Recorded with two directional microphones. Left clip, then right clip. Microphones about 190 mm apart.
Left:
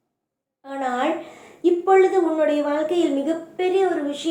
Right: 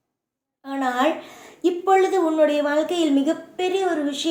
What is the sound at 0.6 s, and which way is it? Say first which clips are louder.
A woman's voice: right 2 dB; 50° right (ahead or behind).